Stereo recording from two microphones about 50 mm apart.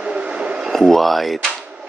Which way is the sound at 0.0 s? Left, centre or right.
Right.